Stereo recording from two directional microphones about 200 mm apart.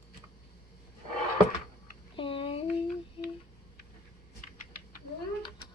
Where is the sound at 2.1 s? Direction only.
25° left (ahead or behind).